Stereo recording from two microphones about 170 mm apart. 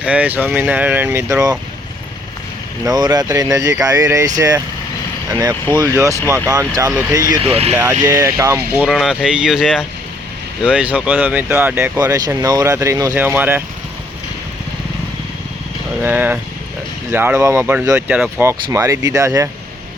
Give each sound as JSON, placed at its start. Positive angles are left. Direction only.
{"t": 0.0, "sound": "speech", "side_deg": -10}
{"t": 2.8, "sound": "speech", "side_deg": -20}
{"t": 7.7, "sound": "speech", "side_deg": -10}
{"t": 11.9, "sound": "speech", "side_deg": -20}
{"t": 16.0, "sound": "speech", "side_deg": -10}